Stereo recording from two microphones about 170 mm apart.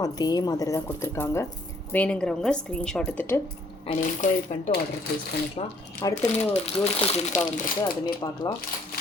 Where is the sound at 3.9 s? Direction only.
45° left (ahead or behind).